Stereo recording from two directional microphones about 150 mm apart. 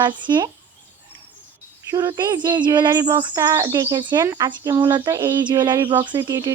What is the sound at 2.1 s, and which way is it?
Speech, 30° right (ahead or behind).